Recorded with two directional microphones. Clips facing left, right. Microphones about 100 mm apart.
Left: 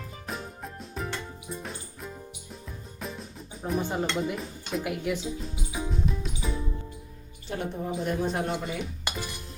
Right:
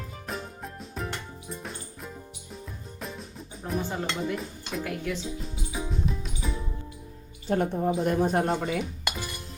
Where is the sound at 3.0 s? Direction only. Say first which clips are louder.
Left 1 dB; centre (ahead or behind).